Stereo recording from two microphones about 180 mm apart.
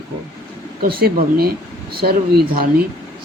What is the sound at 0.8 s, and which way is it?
Speech, 55° right (ahead or behind).